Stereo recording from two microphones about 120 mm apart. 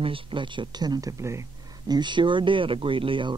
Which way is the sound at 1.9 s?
40° right (ahead or behind).